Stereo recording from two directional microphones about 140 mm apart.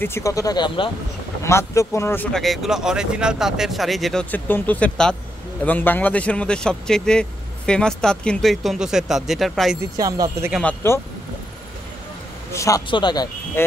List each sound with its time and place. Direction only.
0.0 s speech: 20° left (ahead or behind); by 0.9 s 35° left (ahead or behind)
1.4 s speech: 20° left (ahead or behind)
2.3 s speech: centre (ahead or behind)
9.8 s speech: 25° right (ahead or behind)
10.6 s speech: 15° left (ahead or behind)
12.5 s speech: 25° left (ahead or behind)
13.6 s speech: 15° left (ahead or behind)